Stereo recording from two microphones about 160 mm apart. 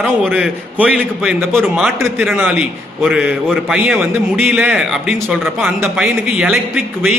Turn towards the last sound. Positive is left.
turn(degrees=-5)  # may be behind; listen again after turning